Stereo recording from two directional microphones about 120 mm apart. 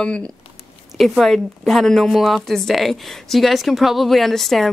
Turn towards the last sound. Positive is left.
turn(degrees=0)  # may be behind; listen again after turning